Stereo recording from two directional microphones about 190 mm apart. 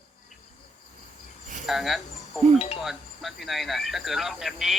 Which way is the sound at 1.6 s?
Centre (ahead or behind).